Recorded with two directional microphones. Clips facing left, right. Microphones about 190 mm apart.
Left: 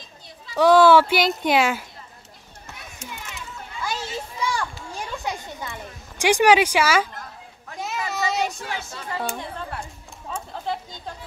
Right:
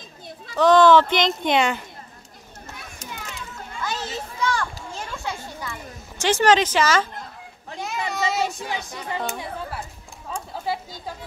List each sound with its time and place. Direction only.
0.6 s speech: 10° left (ahead or behind)
3.8 s children playing: 10° left (ahead or behind)
4.9 s a sound: 15° left (ahead or behind)
7.8 s child singing: centre (ahead or behind)
8.5 s a woman's voice: 15° right (ahead or behind)
10.5 s a sound: 5° right (ahead or behind)